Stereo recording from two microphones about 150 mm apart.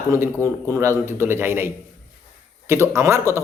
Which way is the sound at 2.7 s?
20° right (ahead or behind).